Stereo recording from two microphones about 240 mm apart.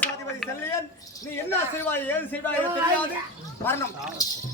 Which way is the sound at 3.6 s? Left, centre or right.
Centre.